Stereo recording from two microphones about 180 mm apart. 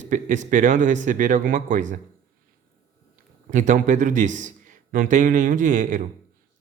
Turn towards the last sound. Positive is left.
turn(degrees=-45)  # may be behind; listen again after turning